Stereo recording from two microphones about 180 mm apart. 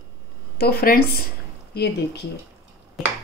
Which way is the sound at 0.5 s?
60° left (ahead or behind).